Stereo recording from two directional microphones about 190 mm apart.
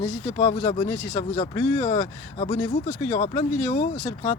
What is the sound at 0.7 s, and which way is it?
Speech, 25° left (ahead or behind).